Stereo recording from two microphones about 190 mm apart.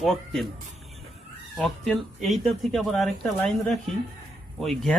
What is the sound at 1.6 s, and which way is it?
Speech, centre (ahead or behind).